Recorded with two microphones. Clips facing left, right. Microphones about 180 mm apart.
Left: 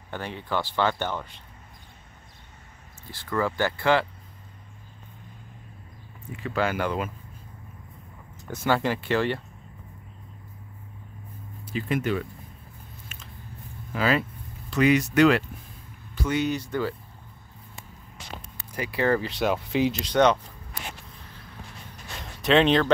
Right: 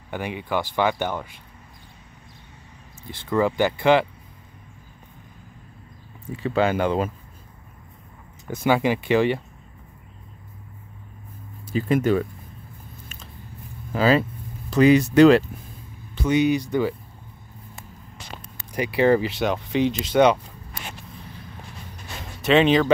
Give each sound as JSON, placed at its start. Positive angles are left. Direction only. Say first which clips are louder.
{"t": 0.1, "sound": "speech", "louder": "right 4 dB", "side_deg": -15}
{"t": 3.1, "sound": "speech", "louder": "right 5 dB", "side_deg": -20}
{"t": 6.3, "sound": "speech", "louder": "right 5 dB", "side_deg": -30}
{"t": 8.5, "sound": "speech", "louder": "right 4 dB", "side_deg": -15}
{"t": 11.6, "sound": "speech", "louder": "right 6 dB", "side_deg": -40}
{"t": 13.9, "sound": "speech", "louder": "right 5 dB", "side_deg": -30}
{"t": 16.2, "sound": "speech", "louder": "right 6 dB", "side_deg": -15}
{"t": 18.8, "sound": "speech", "louder": "right 6 dB", "side_deg": -15}
{"t": 19.3, "sound": "speech", "louder": "right 2 dB", "side_deg": 0}
{"t": 22.2, "sound": "speech", "louder": "right 2 dB", "side_deg": 0}